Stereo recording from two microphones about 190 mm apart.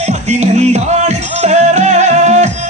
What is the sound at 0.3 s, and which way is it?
Music, 35° right (ahead or behind).